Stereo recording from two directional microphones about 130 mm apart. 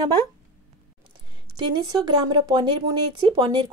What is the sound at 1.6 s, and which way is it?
Speech, 40° right (ahead or behind).